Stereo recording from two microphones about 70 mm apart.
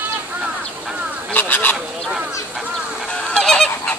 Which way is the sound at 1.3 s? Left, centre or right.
Left.